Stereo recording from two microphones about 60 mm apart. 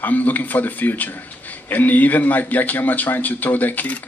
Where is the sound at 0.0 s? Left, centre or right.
Left.